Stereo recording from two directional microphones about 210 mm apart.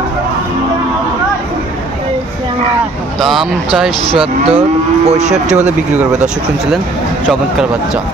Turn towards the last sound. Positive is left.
turn(degrees=0)  # may be behind; listen again after turning